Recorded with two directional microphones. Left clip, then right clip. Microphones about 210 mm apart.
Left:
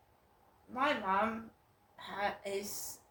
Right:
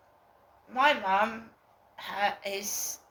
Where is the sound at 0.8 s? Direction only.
15° left (ahead or behind).